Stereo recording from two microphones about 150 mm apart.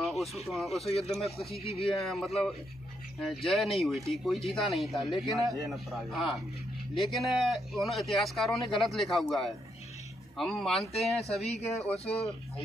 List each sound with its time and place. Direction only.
0.0 s a sound: centre (ahead or behind)
0.5 s speech: centre (ahead or behind)
0.8 s speech: 45° left (ahead or behind)
2.0 s speech: centre (ahead or behind)
3.4 s speech: centre (ahead or behind)
11.1 s speech: 45° left (ahead or behind)